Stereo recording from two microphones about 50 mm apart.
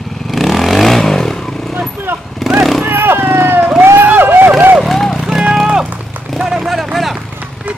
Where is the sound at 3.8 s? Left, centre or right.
Right.